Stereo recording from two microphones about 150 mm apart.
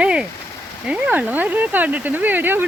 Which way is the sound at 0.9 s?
10° right (ahead or behind).